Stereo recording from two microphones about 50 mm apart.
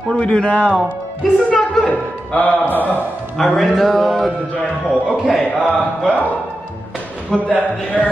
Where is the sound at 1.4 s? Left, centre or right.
Left.